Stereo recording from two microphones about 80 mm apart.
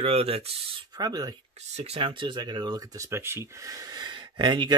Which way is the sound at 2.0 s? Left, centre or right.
Right.